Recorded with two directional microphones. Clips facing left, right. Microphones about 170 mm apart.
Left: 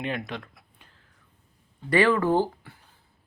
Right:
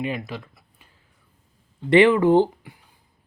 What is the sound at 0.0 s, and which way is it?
Speech, 5° right (ahead or behind).